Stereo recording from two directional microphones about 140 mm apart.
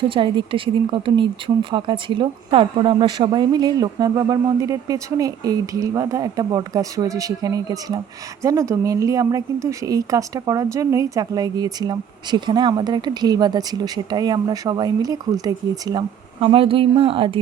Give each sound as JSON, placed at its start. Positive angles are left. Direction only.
{"t": 0.0, "sound": "speech", "side_deg": -35}
{"t": 16.4, "sound": "speech", "side_deg": -40}